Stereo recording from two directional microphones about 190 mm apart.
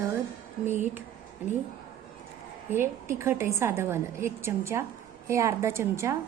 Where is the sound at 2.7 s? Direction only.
10° right (ahead or behind).